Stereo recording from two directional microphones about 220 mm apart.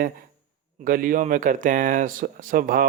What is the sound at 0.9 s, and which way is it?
Speech, 40° right (ahead or behind).